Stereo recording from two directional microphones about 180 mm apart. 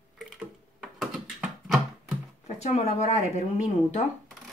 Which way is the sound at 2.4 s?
35° left (ahead or behind).